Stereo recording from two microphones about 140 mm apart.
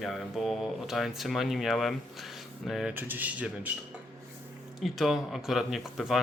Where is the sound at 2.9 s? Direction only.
15° right (ahead or behind).